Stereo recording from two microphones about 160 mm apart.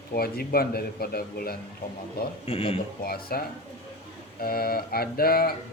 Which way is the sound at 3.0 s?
70° left (ahead or behind).